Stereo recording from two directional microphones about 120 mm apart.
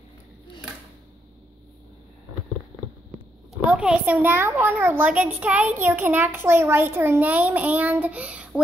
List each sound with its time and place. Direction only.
3.7 s a child's voice: 10° right (ahead or behind)